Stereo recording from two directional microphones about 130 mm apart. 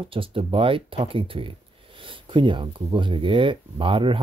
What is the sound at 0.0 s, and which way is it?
Speech, 45° right (ahead or behind).